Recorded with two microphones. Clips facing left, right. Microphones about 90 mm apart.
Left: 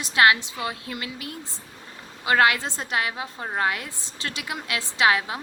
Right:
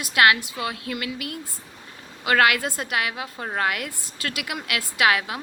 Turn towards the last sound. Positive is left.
turn(degrees=30)  # may be behind; listen again after turning